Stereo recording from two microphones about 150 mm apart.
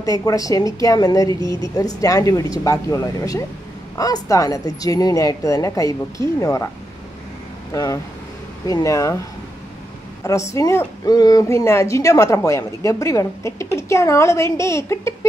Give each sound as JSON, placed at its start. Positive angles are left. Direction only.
{"t": 0.0, "sound": "a woman's voice", "side_deg": 25}
{"t": 7.7, "sound": "a woman's voice", "side_deg": 20}
{"t": 10.2, "sound": "a woman's voice", "side_deg": 20}